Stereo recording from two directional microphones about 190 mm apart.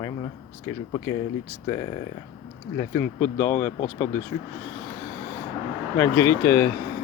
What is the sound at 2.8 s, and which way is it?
Speech, 15° left (ahead or behind).